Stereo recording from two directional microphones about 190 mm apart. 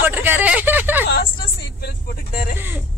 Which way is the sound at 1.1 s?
55° left (ahead or behind).